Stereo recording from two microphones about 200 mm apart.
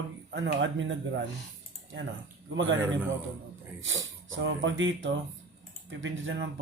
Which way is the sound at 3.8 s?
75° right (ahead or behind).